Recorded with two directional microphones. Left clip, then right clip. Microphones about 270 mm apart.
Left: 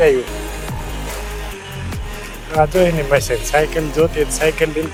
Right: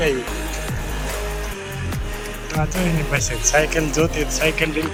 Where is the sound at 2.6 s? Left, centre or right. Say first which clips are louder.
Left 11 dB; left.